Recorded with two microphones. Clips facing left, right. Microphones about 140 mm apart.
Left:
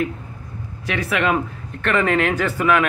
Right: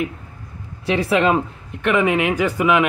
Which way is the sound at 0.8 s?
30° right (ahead or behind).